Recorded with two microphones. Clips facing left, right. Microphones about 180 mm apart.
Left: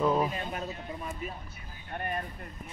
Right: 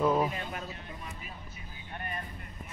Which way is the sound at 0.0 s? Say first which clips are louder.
Even; 5° right (ahead or behind).